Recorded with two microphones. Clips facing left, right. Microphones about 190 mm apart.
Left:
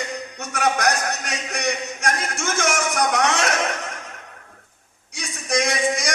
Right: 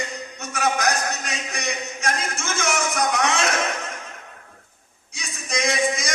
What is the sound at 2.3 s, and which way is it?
Speech, 70° left (ahead or behind).